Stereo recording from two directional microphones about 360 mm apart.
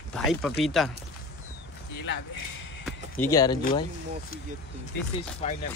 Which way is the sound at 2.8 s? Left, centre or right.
Centre.